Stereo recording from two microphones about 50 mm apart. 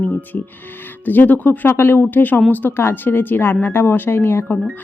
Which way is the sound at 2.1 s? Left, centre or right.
Left.